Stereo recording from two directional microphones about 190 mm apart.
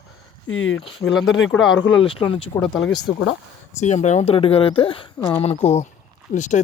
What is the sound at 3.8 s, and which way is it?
Speech, 40° left (ahead or behind).